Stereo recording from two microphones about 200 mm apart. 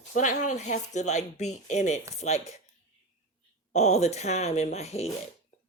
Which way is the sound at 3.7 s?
35° left (ahead or behind).